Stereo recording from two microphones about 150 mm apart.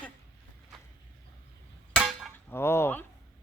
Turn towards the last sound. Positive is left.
turn(degrees=15)  # may be behind; listen again after turning